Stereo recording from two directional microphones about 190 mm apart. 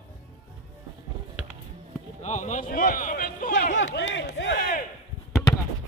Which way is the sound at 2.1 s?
40° left (ahead or behind).